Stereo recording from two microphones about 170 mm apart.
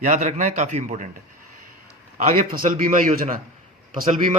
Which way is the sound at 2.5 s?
55° right (ahead or behind).